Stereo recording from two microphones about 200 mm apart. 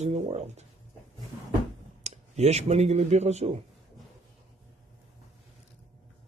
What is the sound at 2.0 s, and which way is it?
Speech, 35° right (ahead or behind).